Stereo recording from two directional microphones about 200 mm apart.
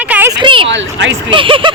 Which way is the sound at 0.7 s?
65° right (ahead or behind).